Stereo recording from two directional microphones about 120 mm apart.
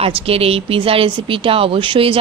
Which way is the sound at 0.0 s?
55° right (ahead or behind).